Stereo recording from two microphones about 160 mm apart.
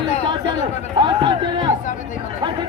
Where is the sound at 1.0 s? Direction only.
30° right (ahead or behind).